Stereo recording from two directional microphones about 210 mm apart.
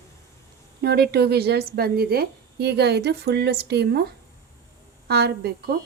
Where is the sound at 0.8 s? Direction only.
50° right (ahead or behind).